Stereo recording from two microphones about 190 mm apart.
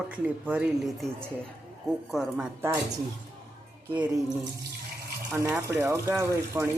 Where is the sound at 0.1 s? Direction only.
5° right (ahead or behind).